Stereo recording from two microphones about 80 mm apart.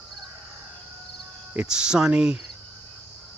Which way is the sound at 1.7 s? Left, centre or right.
Centre.